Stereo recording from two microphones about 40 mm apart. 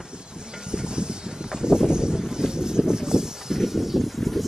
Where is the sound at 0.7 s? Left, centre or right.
Right.